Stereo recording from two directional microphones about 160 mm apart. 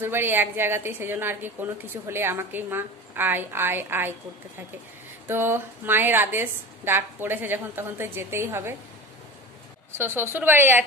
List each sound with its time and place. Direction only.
0.0 s a woman's voice: 15° right (ahead or behind)
5.3 s a woman's voice: 15° right (ahead or behind)
9.9 s a woman's voice: 15° right (ahead or behind)